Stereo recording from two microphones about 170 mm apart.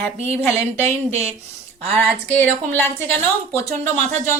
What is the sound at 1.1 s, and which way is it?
Speech, 40° right (ahead or behind).